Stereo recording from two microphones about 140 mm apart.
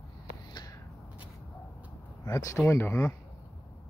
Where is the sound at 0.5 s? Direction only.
30° left (ahead or behind).